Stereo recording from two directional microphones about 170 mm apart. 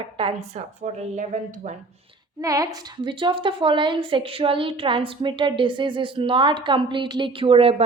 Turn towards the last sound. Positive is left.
turn(degrees=-35)  # may be behind; listen again after turning